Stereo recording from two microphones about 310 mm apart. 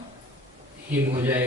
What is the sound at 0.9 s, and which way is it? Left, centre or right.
Speech, centre.